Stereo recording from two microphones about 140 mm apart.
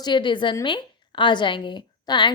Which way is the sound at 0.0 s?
35° left (ahead or behind).